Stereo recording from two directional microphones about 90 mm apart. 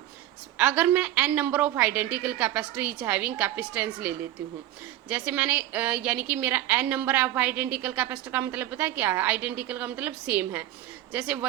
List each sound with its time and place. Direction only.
0.5 s a woman's voice: 15° right (ahead or behind)